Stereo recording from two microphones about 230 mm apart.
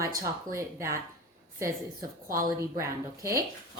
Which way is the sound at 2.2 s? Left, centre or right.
Right.